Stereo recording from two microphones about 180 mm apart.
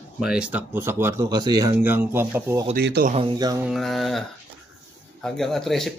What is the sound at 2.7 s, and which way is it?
Speech, 65° right (ahead or behind).